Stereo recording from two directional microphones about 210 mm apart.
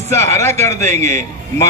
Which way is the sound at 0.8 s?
35° right (ahead or behind).